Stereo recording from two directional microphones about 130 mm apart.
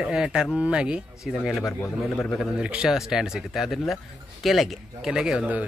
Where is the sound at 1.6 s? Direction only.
25° left (ahead or behind).